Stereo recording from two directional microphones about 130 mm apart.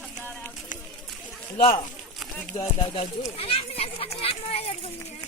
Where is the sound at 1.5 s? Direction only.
45° left (ahead or behind).